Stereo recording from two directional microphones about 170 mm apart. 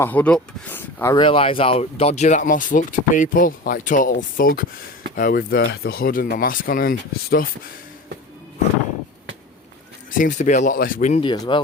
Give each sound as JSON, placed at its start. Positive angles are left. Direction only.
{"t": 0.0, "sound": "speech", "side_deg": 10}
{"t": 1.1, "sound": "speech", "side_deg": 30}
{"t": 10.2, "sound": "speech", "side_deg": 50}
{"t": 11.2, "sound": "speech", "side_deg": 25}